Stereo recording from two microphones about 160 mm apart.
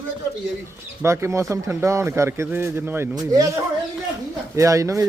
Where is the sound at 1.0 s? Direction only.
15° right (ahead or behind).